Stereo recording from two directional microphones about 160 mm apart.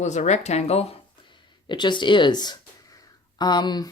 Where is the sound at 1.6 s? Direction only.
30° left (ahead or behind).